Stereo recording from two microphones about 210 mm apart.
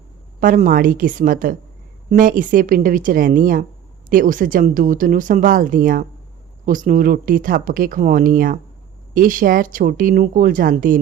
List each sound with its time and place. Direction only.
0.3 s speech: 40° right (ahead or behind)